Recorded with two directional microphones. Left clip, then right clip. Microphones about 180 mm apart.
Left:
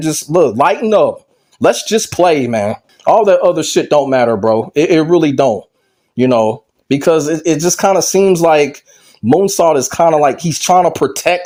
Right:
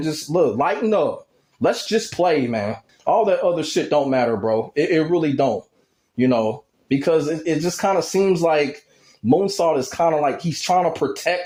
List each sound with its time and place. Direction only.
0.0 s speech: 35° left (ahead or behind)